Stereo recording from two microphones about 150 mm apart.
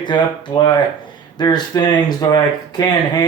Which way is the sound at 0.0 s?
30° left (ahead or behind).